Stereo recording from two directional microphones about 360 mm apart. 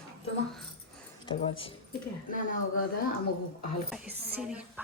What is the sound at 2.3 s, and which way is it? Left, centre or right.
Speech, left.